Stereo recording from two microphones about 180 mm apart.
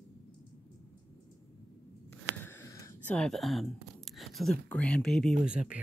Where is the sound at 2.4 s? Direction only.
15° left (ahead or behind).